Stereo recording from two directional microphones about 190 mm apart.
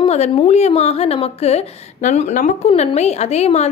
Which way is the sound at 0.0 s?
30° left (ahead or behind).